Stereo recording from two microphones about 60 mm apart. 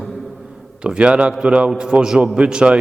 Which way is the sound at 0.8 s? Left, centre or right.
Centre.